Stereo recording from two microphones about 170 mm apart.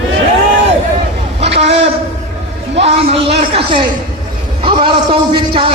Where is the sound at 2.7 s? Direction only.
35° right (ahead or behind).